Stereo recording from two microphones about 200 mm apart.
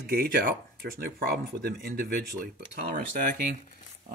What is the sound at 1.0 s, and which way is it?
Speech, 50° right (ahead or behind).